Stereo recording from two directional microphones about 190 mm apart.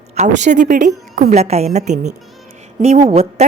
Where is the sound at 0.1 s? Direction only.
40° right (ahead or behind).